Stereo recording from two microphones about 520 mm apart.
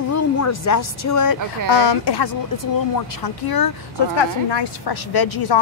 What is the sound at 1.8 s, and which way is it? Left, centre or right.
A woman's voice, left.